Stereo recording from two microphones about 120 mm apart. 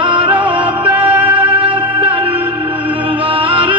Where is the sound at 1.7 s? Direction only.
45° right (ahead or behind).